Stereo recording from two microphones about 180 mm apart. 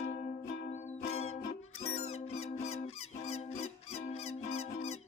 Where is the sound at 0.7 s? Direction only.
35° left (ahead or behind).